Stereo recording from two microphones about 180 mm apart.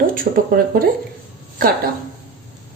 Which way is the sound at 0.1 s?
50° right (ahead or behind).